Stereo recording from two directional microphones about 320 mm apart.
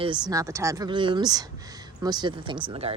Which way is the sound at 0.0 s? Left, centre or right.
Centre.